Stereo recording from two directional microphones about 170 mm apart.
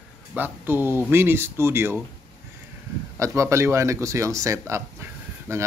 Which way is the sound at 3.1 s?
15° right (ahead or behind).